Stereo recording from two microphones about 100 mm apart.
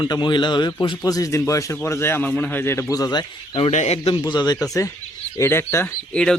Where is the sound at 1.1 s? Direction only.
35° left (ahead or behind).